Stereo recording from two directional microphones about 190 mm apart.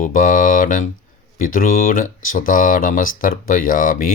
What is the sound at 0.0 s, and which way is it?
Speech, 45° left (ahead or behind).